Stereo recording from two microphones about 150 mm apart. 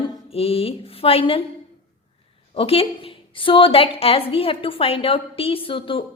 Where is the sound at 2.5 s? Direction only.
40° left (ahead or behind).